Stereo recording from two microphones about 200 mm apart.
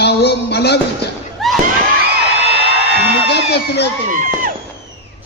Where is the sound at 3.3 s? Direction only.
55° left (ahead or behind).